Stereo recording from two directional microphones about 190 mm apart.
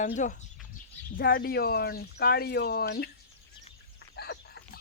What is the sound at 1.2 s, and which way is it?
Speech, 50° left (ahead or behind).